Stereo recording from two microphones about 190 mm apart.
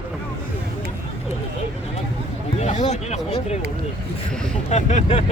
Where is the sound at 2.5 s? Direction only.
35° left (ahead or behind).